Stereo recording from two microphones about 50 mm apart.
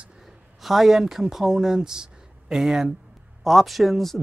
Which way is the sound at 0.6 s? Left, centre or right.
Centre.